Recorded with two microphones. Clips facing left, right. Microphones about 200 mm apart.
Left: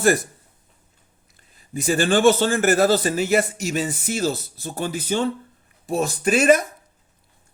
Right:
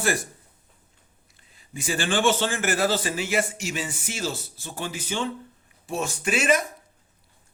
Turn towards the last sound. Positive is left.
turn(degrees=40)  # may be behind; listen again after turning